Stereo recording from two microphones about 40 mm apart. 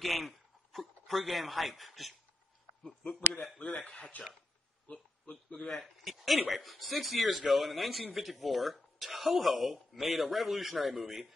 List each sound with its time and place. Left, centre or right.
0.0 s speech: centre
2.8 s speech: centre
3.7 s speech: left
5.7 s speech: centre